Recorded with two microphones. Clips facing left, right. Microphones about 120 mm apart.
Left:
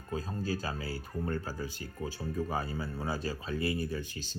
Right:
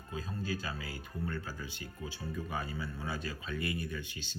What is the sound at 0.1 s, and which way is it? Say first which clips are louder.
Speech: left 4 dB; 40° left (ahead or behind).